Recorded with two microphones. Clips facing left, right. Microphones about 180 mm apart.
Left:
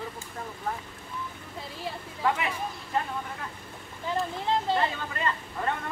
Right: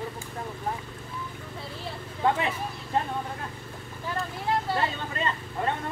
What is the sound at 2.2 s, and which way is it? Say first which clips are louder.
Vehicle: right 3 dB; 25° right (ahead or behind).